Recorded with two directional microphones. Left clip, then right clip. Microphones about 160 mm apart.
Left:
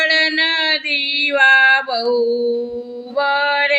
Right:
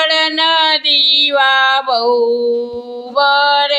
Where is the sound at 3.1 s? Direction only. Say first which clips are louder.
Right 5 dB; 15° left (ahead or behind).